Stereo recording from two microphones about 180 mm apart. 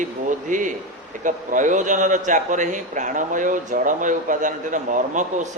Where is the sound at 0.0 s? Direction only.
45° right (ahead or behind).